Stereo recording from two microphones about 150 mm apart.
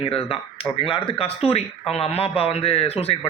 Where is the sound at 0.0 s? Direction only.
40° left (ahead or behind).